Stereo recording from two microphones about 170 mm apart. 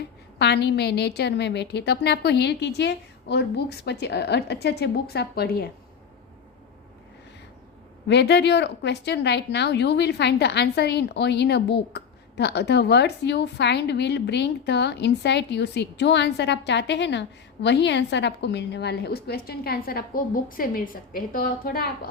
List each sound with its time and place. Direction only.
0.3 s a woman's voice: 80° left
8.0 s a woman's voice: 90° left; by 22.1 s 60° left (ahead or behind)